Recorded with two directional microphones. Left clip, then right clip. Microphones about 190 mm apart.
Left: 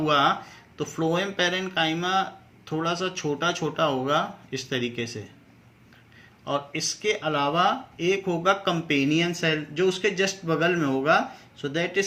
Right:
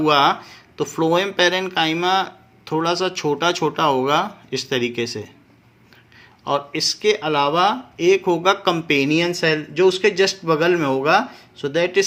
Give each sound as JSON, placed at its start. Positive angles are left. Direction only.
{"t": 0.0, "sound": "speech", "side_deg": -45}
{"t": 6.4, "sound": "speech", "side_deg": -45}